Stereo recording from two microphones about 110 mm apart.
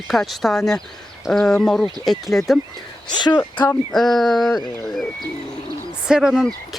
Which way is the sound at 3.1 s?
40° left (ahead or behind).